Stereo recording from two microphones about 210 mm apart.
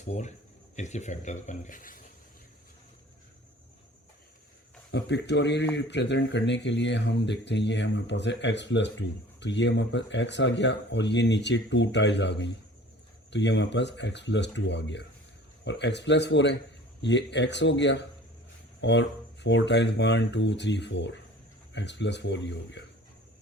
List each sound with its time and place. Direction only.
0.1 s speech: 35° left (ahead or behind)
4.9 s speech: 55° left (ahead or behind)